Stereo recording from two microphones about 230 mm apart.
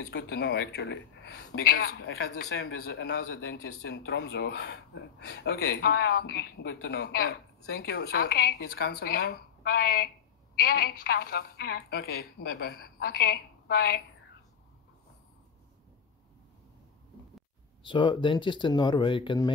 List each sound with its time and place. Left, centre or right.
0.0 s a woman's voice: left
17.8 s speech: left